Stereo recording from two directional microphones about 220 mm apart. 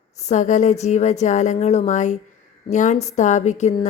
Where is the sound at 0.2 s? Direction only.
30° left (ahead or behind).